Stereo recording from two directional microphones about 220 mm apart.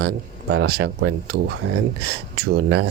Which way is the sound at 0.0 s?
50° right (ahead or behind).